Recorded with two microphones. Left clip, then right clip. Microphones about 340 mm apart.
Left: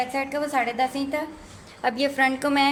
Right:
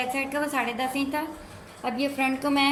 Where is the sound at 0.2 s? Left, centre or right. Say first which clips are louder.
Left 2 dB; centre.